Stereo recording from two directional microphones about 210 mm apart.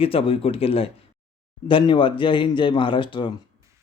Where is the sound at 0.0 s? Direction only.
25° left (ahead or behind).